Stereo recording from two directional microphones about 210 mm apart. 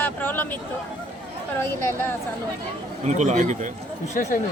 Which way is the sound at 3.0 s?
35° right (ahead or behind).